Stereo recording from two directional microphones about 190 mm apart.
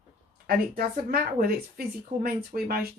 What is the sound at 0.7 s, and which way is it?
A woman's voice, 50° right (ahead or behind).